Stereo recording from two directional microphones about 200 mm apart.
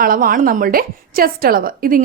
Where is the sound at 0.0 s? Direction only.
45° right (ahead or behind).